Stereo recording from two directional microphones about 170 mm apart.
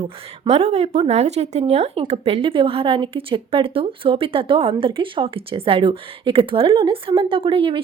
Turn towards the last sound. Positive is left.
turn(degrees=-30)  # may be behind; listen again after turning